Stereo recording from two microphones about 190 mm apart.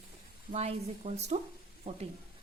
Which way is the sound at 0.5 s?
35° right (ahead or behind).